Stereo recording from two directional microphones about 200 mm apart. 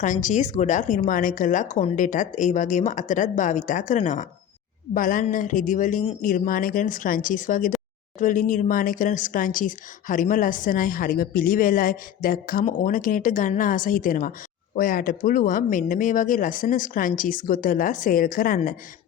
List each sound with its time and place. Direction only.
0.0 s speech: 40° left (ahead or behind)